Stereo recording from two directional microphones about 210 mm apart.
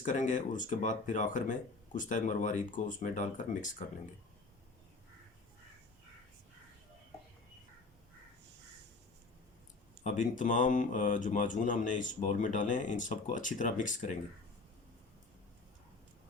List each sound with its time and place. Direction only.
0.0 s speech: 35° left (ahead or behind)
10.0 s speech: 35° left (ahead or behind)